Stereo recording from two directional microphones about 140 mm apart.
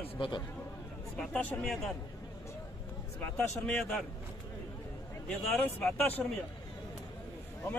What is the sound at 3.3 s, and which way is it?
Speech, 5° left (ahead or behind).